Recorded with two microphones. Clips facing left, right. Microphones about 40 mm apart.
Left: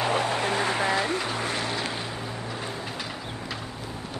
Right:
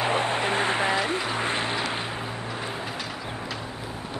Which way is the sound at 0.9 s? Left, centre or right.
Centre.